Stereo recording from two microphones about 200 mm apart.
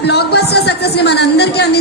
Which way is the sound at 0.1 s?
55° left (ahead or behind).